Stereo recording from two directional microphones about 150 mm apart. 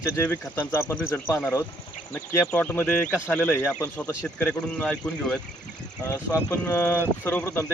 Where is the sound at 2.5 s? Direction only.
15° left (ahead or behind).